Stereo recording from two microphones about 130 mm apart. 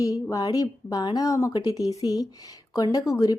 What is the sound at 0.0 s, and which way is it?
A woman's voice, 25° left (ahead or behind).